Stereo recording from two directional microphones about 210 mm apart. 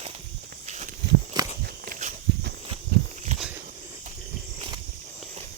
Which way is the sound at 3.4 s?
5° right (ahead or behind).